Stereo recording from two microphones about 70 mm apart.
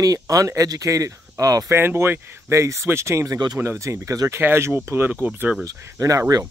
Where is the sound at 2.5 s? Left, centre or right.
Right.